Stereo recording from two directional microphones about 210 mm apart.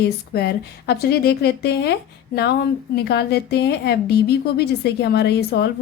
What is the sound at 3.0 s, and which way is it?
Speech, 50° left (ahead or behind).